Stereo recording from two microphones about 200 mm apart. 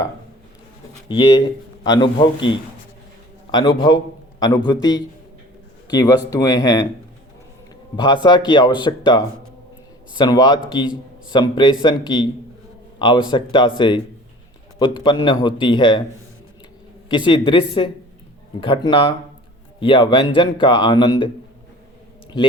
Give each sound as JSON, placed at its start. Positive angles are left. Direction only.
{"t": 1.0, "sound": "speech", "side_deg": 25}
{"t": 3.8, "sound": "speech", "side_deg": 20}
{"t": 7.9, "sound": "speech", "side_deg": 20}
{"t": 13.3, "sound": "speech", "side_deg": 25}
{"t": 17.1, "sound": "speech", "side_deg": 25}